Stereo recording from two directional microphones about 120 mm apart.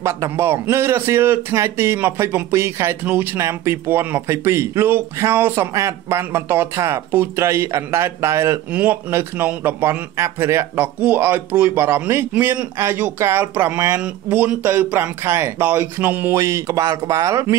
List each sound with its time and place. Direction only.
0.0 s a man's voice: 20° right (ahead or behind)